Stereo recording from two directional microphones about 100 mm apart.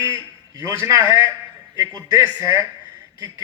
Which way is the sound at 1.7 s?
40° right (ahead or behind).